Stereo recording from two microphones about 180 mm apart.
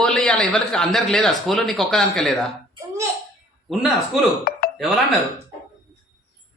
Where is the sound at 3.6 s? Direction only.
Centre (ahead or behind).